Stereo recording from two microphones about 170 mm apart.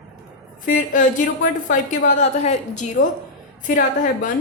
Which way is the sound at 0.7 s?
50° left (ahead or behind).